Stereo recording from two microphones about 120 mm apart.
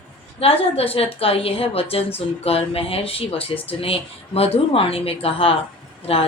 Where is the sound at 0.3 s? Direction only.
55° left (ahead or behind).